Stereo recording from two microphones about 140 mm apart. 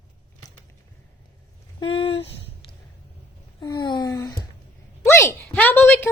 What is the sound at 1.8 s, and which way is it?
Speech, 40° left (ahead or behind).